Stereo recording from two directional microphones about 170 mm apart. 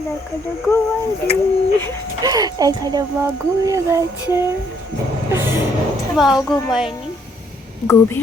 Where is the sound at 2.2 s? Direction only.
20° right (ahead or behind).